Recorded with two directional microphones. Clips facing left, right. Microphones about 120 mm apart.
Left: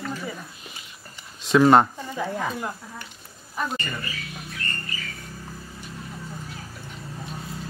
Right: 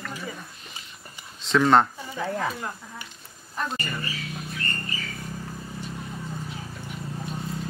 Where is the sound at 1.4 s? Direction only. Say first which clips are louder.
Left 3 dB; 10° left (ahead or behind).